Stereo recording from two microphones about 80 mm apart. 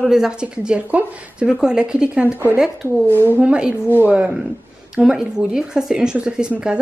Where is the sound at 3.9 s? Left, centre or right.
Right.